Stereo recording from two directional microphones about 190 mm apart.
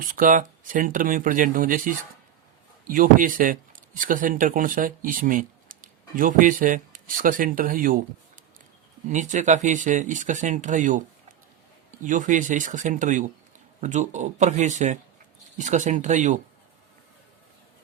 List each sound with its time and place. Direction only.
0.0 s speech: 45° right (ahead or behind)
9.0 s speech: 40° right (ahead or behind)